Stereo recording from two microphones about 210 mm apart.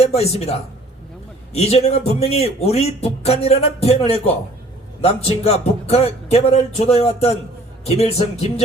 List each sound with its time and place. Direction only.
0.0 s a man's voice: 30° left (ahead or behind)